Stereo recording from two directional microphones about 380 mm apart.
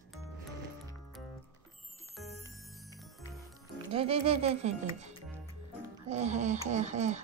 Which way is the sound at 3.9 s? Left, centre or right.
Centre.